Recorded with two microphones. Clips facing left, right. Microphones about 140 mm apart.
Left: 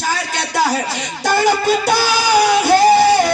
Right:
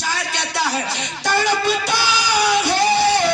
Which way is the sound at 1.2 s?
45° left (ahead or behind).